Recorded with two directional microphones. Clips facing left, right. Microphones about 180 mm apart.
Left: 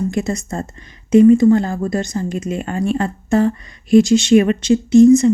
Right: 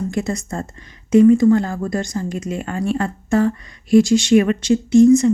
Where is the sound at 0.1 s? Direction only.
20° left (ahead or behind).